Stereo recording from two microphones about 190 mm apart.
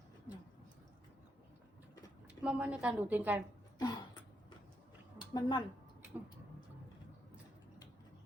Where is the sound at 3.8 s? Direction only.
20° left (ahead or behind).